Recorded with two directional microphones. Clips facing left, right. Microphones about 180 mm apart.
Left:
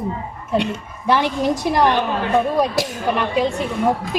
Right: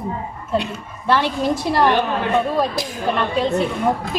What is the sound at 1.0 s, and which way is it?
Speech, 15° left (ahead or behind).